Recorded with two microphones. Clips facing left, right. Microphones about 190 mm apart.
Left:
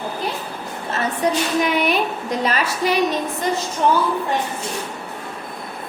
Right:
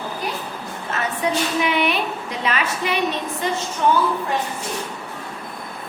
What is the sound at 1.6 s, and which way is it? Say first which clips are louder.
A woman's voice: left 2 dB; 40° left (ahead or behind).